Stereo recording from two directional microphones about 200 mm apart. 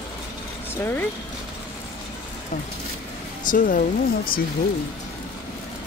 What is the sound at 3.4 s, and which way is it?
Speech, 45° left (ahead or behind).